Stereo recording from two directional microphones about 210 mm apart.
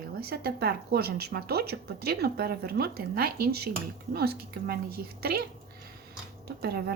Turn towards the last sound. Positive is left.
turn(degrees=-50)  # may be behind; listen again after turning